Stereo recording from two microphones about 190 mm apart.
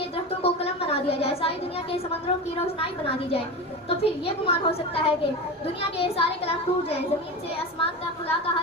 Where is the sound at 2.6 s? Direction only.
30° left (ahead or behind).